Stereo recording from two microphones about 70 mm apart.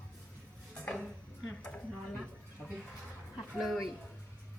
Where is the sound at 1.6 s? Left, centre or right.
Centre.